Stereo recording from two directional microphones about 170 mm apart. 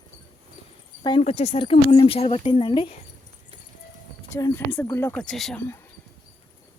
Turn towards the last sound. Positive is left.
turn(degrees=5)  # may be behind; listen again after turning